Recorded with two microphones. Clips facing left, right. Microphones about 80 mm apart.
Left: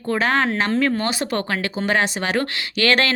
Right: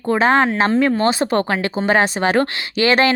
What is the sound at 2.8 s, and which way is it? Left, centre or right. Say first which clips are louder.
Speech: right 4 dB; centre.